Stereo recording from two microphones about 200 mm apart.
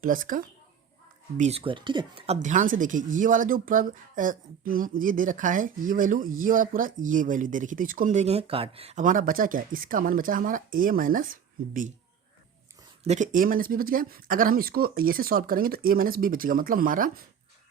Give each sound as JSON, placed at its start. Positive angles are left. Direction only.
{"t": 0.0, "sound": "speech", "side_deg": -45}
{"t": 1.4, "sound": "speech", "side_deg": -30}
{"t": 13.1, "sound": "speech", "side_deg": -40}